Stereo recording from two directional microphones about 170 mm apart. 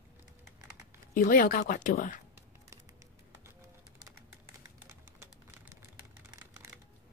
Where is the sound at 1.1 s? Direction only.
55° left (ahead or behind).